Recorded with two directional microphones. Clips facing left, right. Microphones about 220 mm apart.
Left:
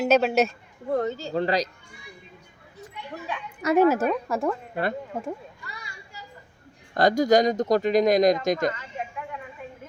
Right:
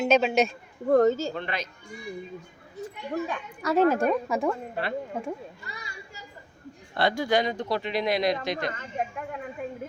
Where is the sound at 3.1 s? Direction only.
40° right (ahead or behind).